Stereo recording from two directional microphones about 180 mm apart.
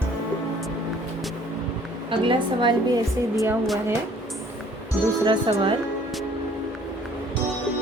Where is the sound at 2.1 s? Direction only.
25° right (ahead or behind).